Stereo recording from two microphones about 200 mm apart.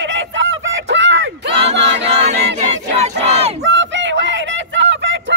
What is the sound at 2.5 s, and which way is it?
Battle cry, 35° right (ahead or behind).